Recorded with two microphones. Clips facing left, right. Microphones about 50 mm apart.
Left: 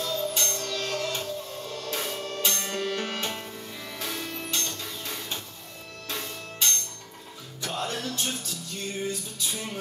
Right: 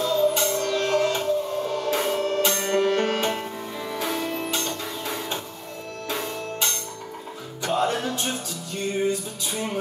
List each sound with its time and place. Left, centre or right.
0.0 s music: centre
2.7 s music: right